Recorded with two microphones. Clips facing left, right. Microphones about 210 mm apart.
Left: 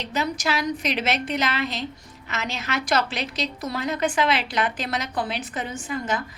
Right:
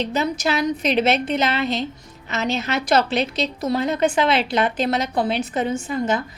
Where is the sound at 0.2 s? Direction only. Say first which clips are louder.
Right 2 dB; 25° right (ahead or behind).